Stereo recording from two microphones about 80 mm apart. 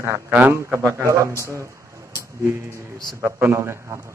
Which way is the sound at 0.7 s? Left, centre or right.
Right.